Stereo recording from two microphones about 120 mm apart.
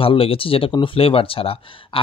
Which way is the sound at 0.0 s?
50° left (ahead or behind).